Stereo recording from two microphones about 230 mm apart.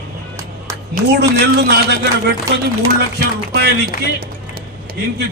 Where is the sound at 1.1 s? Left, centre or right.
Right.